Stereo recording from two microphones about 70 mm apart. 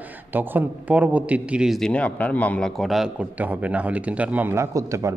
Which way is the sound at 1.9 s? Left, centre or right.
Left.